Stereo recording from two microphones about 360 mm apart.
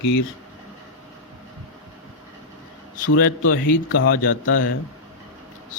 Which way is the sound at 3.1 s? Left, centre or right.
Left.